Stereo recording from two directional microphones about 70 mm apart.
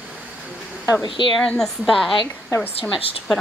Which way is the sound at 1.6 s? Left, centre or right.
Centre.